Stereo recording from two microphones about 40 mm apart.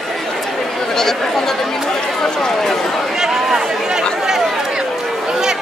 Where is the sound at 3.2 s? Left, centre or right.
Centre.